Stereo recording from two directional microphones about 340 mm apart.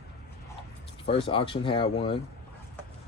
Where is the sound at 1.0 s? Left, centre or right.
Centre.